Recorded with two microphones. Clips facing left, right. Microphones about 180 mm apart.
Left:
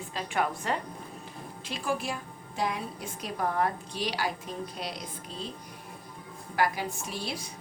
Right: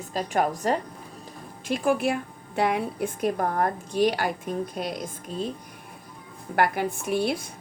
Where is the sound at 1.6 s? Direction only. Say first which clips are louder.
Right 9 dB; 55° right (ahead or behind).